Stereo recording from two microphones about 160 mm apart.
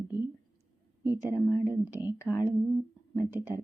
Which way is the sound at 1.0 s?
15° right (ahead or behind).